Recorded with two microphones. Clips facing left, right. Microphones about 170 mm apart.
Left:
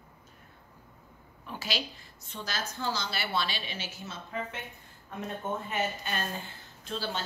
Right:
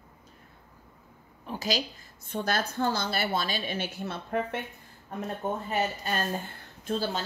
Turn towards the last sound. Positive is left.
turn(degrees=-45)  # may be behind; listen again after turning